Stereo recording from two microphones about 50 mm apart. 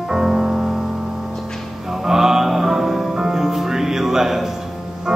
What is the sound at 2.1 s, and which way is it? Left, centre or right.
Music, centre.